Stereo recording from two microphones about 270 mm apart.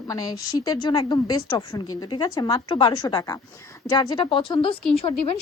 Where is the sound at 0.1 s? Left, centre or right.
Centre.